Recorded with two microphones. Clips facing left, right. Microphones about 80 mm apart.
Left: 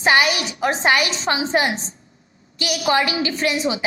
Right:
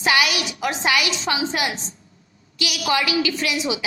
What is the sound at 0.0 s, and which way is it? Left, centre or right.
A woman's voice, left.